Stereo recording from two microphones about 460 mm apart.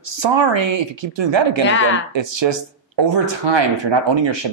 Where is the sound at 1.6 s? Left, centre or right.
Left.